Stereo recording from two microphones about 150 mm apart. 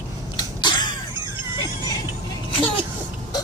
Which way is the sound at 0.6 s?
30° left (ahead or behind).